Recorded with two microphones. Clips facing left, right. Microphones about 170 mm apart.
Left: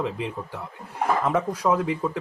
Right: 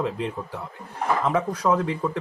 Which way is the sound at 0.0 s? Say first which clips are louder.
Right 1 dB; centre (ahead or behind).